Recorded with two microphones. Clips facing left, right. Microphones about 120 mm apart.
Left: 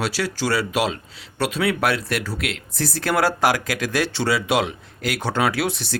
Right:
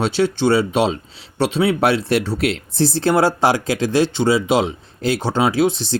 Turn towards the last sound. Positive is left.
turn(degrees=-25)  # may be behind; listen again after turning